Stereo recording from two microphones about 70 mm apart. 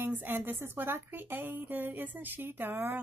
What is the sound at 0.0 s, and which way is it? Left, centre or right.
Speech, right.